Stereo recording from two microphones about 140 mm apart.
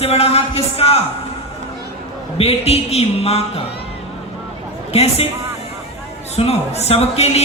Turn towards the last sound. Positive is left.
turn(degrees=50)  # may be behind; listen again after turning